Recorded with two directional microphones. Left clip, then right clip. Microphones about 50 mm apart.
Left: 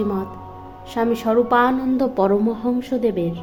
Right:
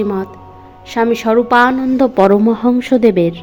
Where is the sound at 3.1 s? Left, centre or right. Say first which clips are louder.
Right 10 dB; right.